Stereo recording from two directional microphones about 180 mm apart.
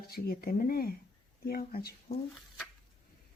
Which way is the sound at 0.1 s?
55° left (ahead or behind).